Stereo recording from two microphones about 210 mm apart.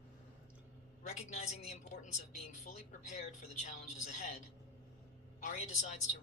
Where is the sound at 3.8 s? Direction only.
35° left (ahead or behind).